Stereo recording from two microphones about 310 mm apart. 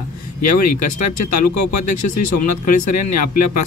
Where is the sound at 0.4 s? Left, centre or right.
Left.